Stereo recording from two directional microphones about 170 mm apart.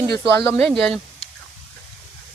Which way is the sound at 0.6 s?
5° left (ahead or behind).